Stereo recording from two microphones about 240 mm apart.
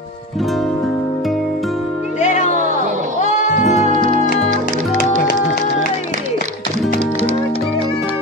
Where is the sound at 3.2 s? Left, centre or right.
Left.